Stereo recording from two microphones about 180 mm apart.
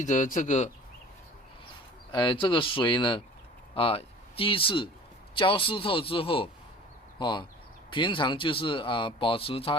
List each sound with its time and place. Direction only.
0.0 s speech: 45° left (ahead or behind)
2.1 s speech: 25° left (ahead or behind)